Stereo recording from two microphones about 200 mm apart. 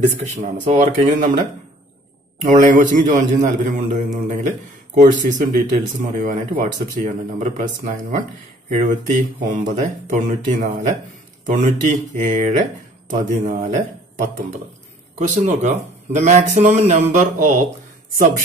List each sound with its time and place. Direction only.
0.2 s a man's voice: 35° right (ahead or behind)
2.5 s a man's voice: 40° right (ahead or behind)